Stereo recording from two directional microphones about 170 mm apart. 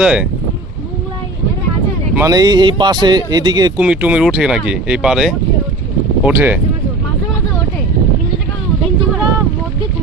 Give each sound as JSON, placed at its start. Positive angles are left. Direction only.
{"t": 0.0, "sound": "speech", "side_deg": -5}
{"t": 2.1, "sound": "a man's voice", "side_deg": -20}
{"t": 3.8, "sound": "speech", "side_deg": -10}